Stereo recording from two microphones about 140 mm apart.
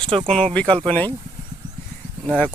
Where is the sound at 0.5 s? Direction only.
10° left (ahead or behind).